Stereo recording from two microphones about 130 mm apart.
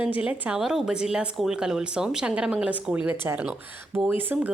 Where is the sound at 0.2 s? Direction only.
10° right (ahead or behind).